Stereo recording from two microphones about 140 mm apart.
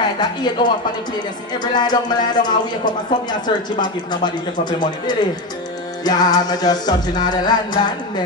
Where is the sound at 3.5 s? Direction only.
35° left (ahead or behind).